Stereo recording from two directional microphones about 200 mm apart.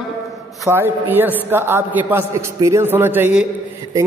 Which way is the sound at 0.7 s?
10° right (ahead or behind).